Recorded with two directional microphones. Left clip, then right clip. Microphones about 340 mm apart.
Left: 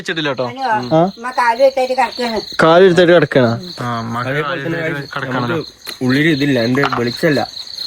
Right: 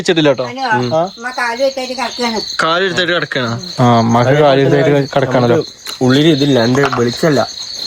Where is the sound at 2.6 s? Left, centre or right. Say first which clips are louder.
Left 6 dB; centre.